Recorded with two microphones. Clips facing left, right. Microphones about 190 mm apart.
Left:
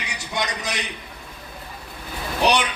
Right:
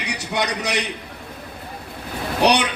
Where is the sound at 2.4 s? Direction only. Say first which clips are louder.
Right 3 dB; 65° right (ahead or behind).